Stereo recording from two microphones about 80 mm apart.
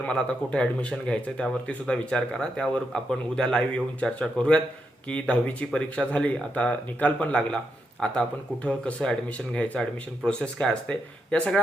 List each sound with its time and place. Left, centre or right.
0.0 s speech: centre